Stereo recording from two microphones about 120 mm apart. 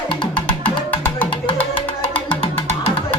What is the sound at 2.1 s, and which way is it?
Music, 45° left (ahead or behind).